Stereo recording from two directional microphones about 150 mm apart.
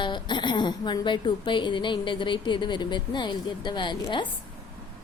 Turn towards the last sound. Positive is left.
turn(degrees=30)  # may be behind; listen again after turning